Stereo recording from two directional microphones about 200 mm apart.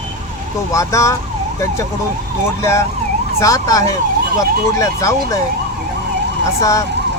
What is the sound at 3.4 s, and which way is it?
Speech, 15° left (ahead or behind).